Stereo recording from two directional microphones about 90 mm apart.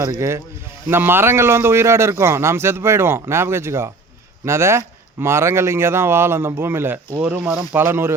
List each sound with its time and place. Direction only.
0.0 s speech: 30° right (ahead or behind)